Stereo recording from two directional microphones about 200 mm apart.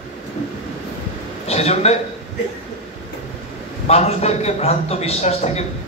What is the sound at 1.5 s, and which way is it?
Speech, 30° left (ahead or behind).